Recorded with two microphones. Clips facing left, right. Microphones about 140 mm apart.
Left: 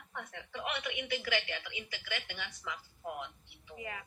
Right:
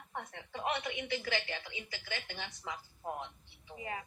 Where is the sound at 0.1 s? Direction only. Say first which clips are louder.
Right 1 dB; 35° right (ahead or behind).